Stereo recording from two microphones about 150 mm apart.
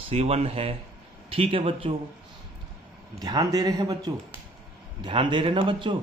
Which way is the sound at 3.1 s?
25° right (ahead or behind).